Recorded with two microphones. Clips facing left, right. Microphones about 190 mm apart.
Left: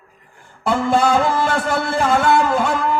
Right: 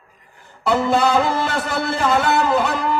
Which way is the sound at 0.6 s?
50° left (ahead or behind).